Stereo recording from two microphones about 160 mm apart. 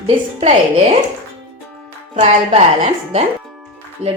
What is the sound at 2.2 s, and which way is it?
Speech, 40° right (ahead or behind).